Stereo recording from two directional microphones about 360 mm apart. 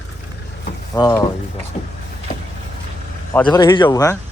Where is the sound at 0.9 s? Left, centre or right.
Centre.